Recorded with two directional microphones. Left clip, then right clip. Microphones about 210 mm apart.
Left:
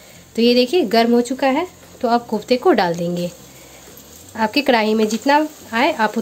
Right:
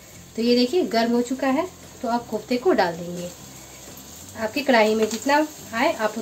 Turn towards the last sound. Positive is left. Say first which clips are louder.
# left 5 dB
turn(degrees=50)  # may be behind; listen again after turning